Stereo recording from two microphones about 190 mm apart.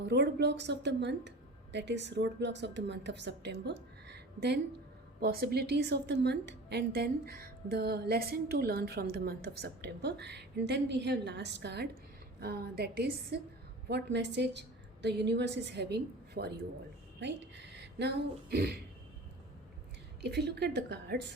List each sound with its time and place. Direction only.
0.0 s a woman's voice: 60° right (ahead or behind)
20.2 s a woman's voice: 60° right (ahead or behind)